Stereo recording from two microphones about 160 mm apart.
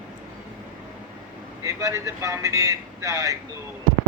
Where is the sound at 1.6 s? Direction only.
20° right (ahead or behind).